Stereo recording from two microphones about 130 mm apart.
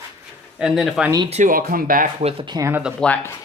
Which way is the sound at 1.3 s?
80° right.